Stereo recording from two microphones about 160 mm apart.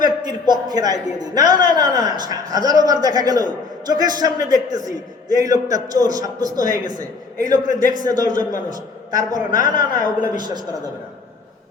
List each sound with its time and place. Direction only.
0.3 s a man's voice: 25° right (ahead or behind)
6.6 s a man's voice: 55° left (ahead or behind)
6.8 s a man's voice: 25° right (ahead or behind)
7.5 s a man's voice: 55° left (ahead or behind)
8.2 s a man's voice: 25° right (ahead or behind)
9.5 s a woman's voice: 55° left (ahead or behind)
10.3 s a man's voice: 25° right (ahead or behind)